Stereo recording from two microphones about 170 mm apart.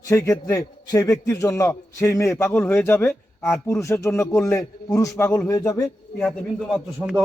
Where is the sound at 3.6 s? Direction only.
15° left (ahead or behind).